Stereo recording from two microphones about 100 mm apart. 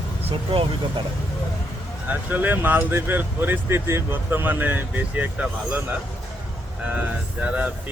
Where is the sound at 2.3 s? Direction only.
20° right (ahead or behind).